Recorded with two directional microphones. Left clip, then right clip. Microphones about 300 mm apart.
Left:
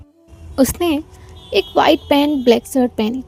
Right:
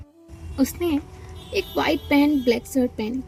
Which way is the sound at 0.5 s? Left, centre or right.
Left.